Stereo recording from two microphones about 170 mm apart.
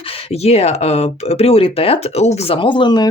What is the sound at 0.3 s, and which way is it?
Speech, 40° left (ahead or behind).